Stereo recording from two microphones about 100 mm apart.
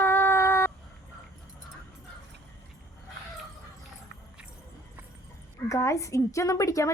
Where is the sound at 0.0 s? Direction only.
20° left (ahead or behind).